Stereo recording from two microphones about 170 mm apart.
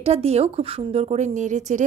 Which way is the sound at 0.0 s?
35° right (ahead or behind).